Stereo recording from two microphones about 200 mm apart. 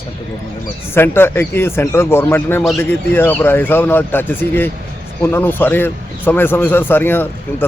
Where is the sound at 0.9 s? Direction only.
10° left (ahead or behind).